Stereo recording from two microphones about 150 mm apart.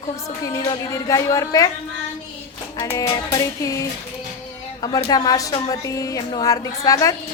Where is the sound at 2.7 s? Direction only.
20° left (ahead or behind).